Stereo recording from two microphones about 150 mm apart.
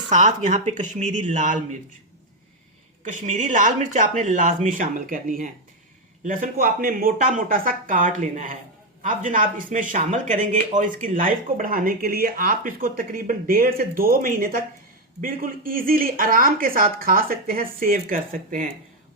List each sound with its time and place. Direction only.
0.1 s speech: 55° right (ahead or behind)
3.0 s speech: 55° right (ahead or behind)